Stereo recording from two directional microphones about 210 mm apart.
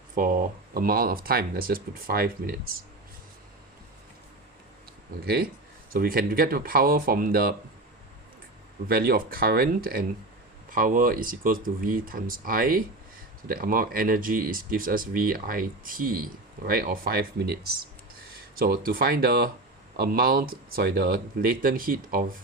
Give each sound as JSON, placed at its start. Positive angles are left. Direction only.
{"t": 0.2, "sound": "speech", "side_deg": -40}
{"t": 5.2, "sound": "speech", "side_deg": -45}
{"t": 8.9, "sound": "speech", "side_deg": -45}